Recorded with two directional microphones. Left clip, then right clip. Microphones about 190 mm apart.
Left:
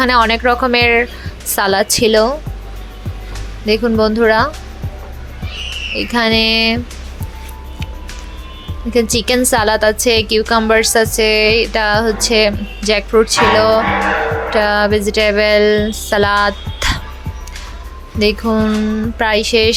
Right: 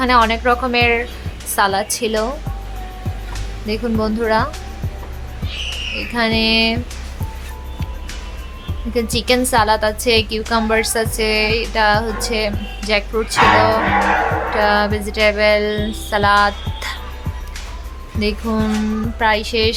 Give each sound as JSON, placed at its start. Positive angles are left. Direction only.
{"t": 0.0, "sound": "music", "side_deg": 20}
{"t": 3.7, "sound": "music", "side_deg": 20}
{"t": 6.0, "sound": "music", "side_deg": 25}
{"t": 8.9, "sound": "music", "side_deg": 20}
{"t": 18.2, "sound": "music", "side_deg": 25}